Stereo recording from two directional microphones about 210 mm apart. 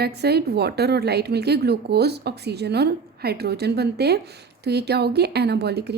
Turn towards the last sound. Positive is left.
turn(degrees=-50)  # may be behind; listen again after turning